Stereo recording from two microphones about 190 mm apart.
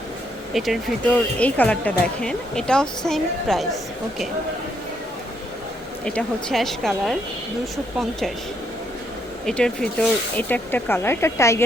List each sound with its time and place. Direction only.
0.5 s speech: centre (ahead or behind)
6.1 s speech: 5° left (ahead or behind)
9.5 s speech: 5° left (ahead or behind)